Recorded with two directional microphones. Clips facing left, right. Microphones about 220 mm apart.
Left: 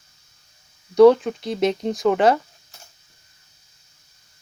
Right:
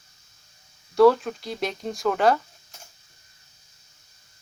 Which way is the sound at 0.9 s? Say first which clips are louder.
Left 5 dB; 20° left (ahead or behind).